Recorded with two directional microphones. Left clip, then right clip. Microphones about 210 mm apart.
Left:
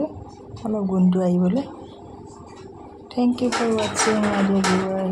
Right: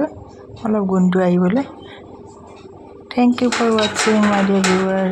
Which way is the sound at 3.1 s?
20° right (ahead or behind).